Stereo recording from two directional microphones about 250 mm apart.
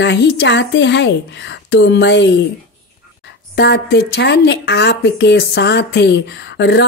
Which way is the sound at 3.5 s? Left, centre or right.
Left.